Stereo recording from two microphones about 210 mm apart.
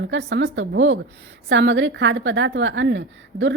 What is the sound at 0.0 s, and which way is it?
A woman's voice, 60° right (ahead or behind).